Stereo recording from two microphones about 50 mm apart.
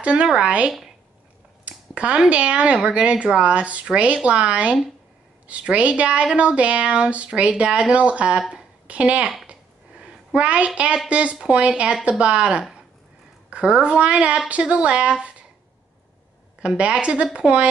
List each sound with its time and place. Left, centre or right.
0.0 s speech: right
0.7 s speech: centre
1.6 s speech: right
8.4 s speech: centre
8.8 s speech: right
9.5 s a sound: right
11.1 s speech: right
16.6 s speech: right